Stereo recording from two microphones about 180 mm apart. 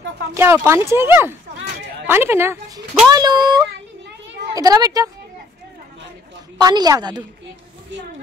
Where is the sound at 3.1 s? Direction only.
20° right (ahead or behind).